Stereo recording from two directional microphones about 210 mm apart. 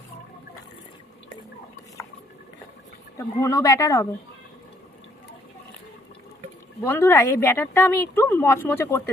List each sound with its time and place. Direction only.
3.2 s a woman's voice: 15° left (ahead or behind)
6.8 s a woman's voice: 10° left (ahead or behind)